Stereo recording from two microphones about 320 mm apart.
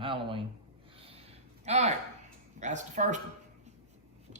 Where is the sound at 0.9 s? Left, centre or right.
Centre.